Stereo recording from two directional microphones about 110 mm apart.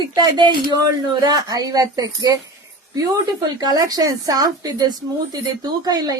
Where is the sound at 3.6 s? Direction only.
35° right (ahead or behind).